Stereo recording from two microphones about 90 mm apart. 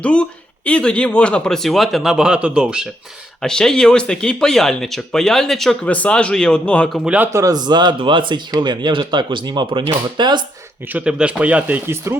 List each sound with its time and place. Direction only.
0.0 s speech: 15° left (ahead or behind); by 2.9 s 10° right (ahead or behind)
3.4 s speech: 5° left (ahead or behind)
5.8 s speech: 15° left (ahead or behind)
7.3 s speech: 45° right (ahead or behind)
10.8 s speech: 15° right (ahead or behind)
12.1 s speech: 30° right (ahead or behind)